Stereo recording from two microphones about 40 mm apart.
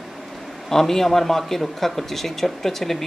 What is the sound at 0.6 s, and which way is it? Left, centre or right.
Speech, centre.